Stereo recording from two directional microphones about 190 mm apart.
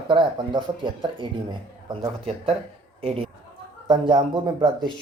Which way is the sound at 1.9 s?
30° right (ahead or behind).